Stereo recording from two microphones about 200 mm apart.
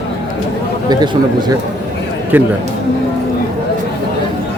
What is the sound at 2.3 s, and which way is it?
Speech, 10° right (ahead or behind).